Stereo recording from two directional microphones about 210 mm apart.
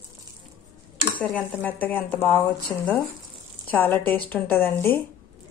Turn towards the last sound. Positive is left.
turn(degrees=10)  # may be behind; listen again after turning